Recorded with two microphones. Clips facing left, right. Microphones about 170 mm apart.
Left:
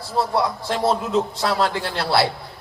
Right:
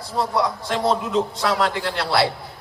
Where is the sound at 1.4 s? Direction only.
30° left (ahead or behind).